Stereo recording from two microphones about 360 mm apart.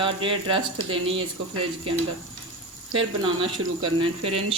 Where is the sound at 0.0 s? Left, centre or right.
Centre.